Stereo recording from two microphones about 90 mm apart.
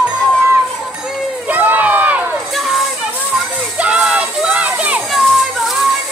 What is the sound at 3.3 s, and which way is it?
Children playing, 5° right (ahead or behind).